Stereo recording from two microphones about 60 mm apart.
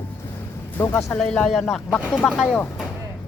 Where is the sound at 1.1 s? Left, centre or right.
Left.